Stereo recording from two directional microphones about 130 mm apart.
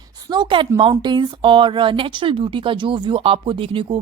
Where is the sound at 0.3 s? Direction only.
35° right (ahead or behind).